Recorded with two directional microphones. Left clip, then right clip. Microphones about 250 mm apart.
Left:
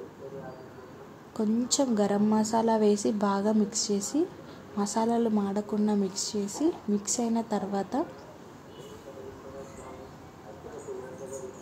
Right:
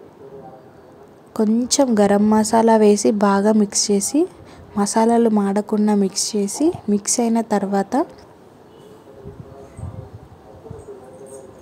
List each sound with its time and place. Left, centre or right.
1.3 s a woman's voice: right